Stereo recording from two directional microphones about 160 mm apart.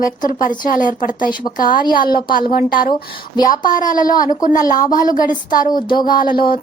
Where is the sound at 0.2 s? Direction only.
55° left (ahead or behind).